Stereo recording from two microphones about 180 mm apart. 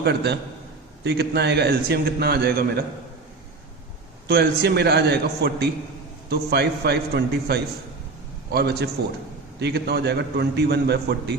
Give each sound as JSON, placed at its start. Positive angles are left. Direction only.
{"t": 0.0, "sound": "a man's voice", "side_deg": -65}
{"t": 4.3, "sound": "a man's voice", "side_deg": -65}